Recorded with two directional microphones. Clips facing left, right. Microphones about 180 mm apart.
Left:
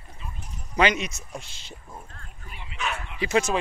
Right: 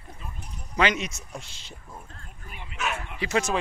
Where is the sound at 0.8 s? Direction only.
10° left (ahead or behind).